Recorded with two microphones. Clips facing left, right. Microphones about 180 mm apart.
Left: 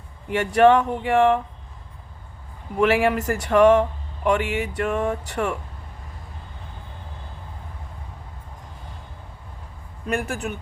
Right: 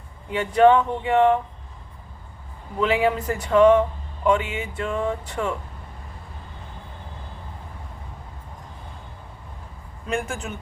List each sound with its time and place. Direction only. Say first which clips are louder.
0.5 s speech: even; 75° left (ahead or behind)
2.7 s speech: left 2 dB; 80° left
10.2 s speech: left 3 dB; 65° left (ahead or behind)